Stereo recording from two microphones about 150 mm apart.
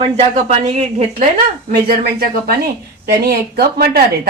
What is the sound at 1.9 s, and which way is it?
Speech, 85° right.